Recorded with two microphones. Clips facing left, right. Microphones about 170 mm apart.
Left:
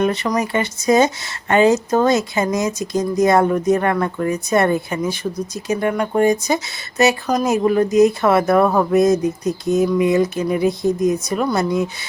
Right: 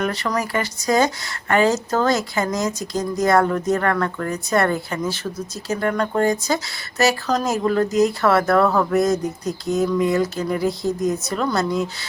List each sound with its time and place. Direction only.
0.0 s speech: 20° left (ahead or behind)